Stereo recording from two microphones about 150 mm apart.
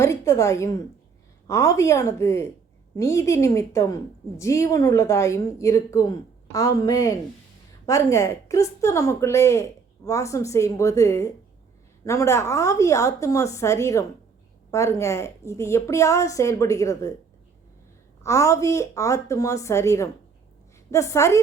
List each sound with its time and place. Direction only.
0.0 s a woman's voice: 20° left (ahead or behind)
18.2 s a woman's voice: 20° left (ahead or behind)